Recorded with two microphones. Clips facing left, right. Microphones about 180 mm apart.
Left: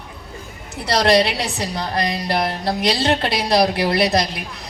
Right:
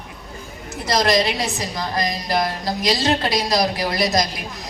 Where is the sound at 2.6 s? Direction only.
65° left (ahead or behind).